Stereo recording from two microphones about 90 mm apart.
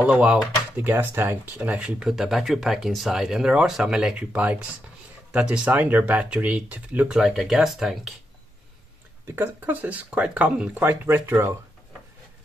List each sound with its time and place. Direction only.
0.0 s speech: 15° right (ahead or behind)
7.2 s speech: centre (ahead or behind)
9.3 s speech: 20° right (ahead or behind)